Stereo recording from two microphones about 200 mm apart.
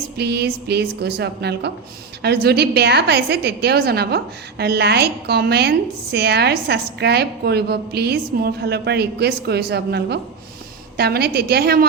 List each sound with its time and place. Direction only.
0.2 s a woman's voice: 55° right (ahead or behind)